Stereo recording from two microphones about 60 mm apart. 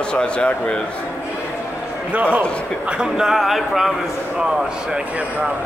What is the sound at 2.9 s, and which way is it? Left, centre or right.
A man's voice, centre.